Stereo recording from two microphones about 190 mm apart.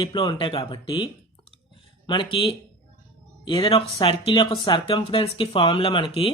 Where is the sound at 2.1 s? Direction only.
25° left (ahead or behind).